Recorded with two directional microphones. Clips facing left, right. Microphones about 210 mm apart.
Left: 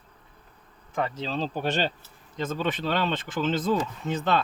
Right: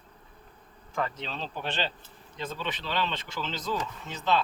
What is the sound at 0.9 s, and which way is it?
Speech, 30° left (ahead or behind).